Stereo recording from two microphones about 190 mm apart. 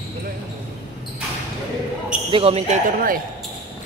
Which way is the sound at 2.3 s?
30° right (ahead or behind).